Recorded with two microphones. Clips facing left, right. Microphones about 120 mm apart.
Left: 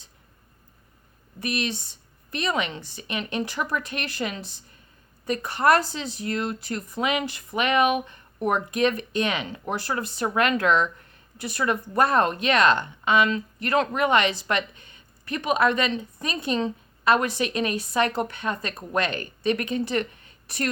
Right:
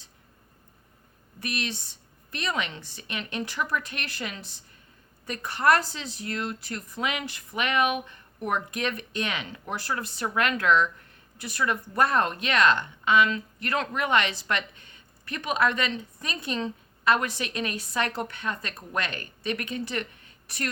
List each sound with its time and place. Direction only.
1.4 s speech: 20° left (ahead or behind)